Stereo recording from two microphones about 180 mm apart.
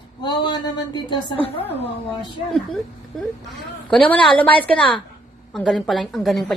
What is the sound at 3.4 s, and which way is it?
A woman's voice, 5° left (ahead or behind).